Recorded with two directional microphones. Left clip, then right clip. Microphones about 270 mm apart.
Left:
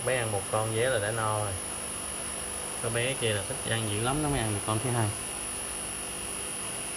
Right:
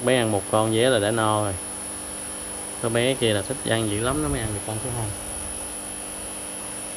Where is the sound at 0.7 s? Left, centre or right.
Right.